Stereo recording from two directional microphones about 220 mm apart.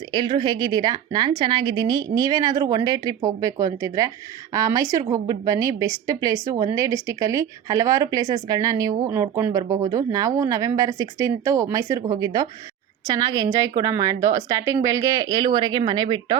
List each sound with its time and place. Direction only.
0.1 s a woman's voice: 20° right (ahead or behind)